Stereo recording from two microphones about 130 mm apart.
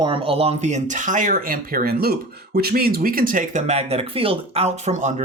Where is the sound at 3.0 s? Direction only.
90° right.